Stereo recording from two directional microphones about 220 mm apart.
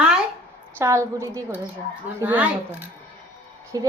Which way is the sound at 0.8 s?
10° right (ahead or behind).